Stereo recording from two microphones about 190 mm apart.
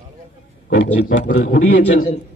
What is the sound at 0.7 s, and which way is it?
Speech, 70° left (ahead or behind).